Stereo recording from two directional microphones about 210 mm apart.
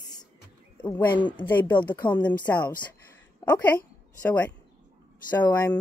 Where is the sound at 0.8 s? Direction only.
10° left (ahead or behind).